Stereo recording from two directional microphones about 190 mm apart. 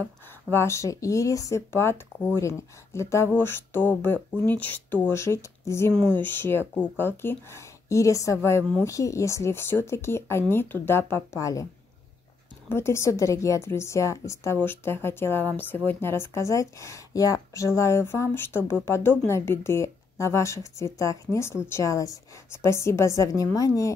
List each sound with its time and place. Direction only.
0.5 s a woman's voice: 15° left (ahead or behind)
12.6 s a woman's voice: 15° left (ahead or behind)